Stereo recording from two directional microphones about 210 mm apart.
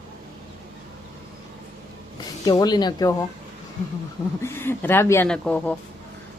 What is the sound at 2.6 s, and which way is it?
Speech, 20° left (ahead or behind).